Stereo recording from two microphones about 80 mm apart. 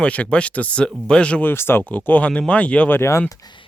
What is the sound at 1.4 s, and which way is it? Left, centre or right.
Speech, left.